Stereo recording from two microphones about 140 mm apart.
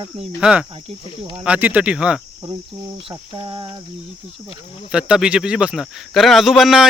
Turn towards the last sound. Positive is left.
turn(degrees=0)  # may be behind; listen again after turning